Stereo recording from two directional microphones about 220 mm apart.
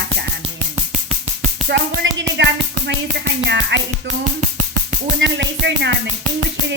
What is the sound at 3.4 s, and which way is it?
Music, 55° right (ahead or behind).